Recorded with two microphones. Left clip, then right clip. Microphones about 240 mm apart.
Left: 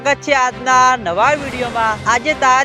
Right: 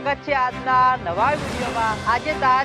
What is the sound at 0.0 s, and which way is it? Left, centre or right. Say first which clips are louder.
Speech: left 7 dB; left.